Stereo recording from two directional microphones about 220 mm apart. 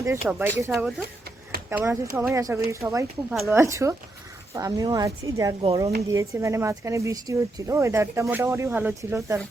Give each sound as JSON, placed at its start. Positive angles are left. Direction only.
{"t": 0.0, "sound": "speech", "side_deg": -10}
{"t": 1.7, "sound": "speech", "side_deg": -10}